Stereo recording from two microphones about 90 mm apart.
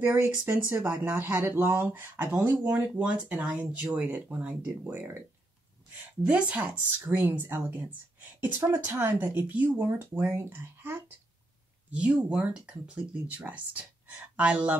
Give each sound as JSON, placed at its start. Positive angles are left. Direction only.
{"t": 0.0, "sound": "speech", "side_deg": -25}
{"t": 6.2, "sound": "speech", "side_deg": -15}
{"t": 11.9, "sound": "speech", "side_deg": -15}